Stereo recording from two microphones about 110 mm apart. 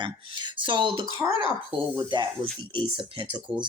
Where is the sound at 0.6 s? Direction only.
45° right (ahead or behind).